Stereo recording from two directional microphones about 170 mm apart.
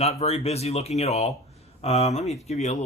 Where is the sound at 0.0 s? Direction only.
40° left (ahead or behind).